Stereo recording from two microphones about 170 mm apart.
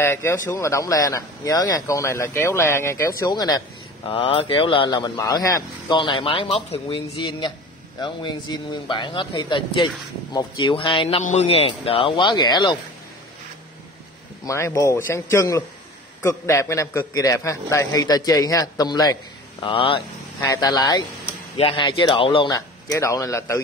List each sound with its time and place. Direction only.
0.0 s speech: 15° left (ahead or behind)
14.4 s a man's voice: 15° left (ahead or behind); by 22.5 s 30° left (ahead or behind)
22.5 s a man's voice: 15° left (ahead or behind)